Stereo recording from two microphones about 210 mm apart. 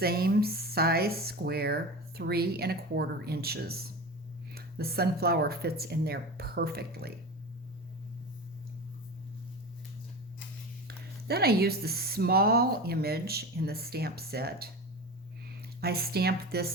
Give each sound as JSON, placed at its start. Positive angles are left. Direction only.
{"t": 0.0, "sound": "speech", "side_deg": -45}
{"t": 10.8, "sound": "speech", "side_deg": -50}
{"t": 15.8, "sound": "speech", "side_deg": -50}